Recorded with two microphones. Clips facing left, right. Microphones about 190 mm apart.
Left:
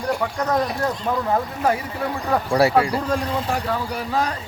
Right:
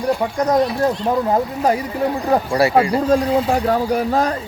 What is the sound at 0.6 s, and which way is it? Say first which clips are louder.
A man's voice: right 6 dB; 30° right (ahead or behind).